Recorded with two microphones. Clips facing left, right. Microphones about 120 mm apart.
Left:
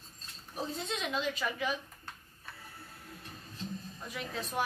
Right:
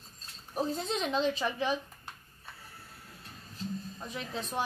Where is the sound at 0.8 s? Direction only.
35° right (ahead or behind).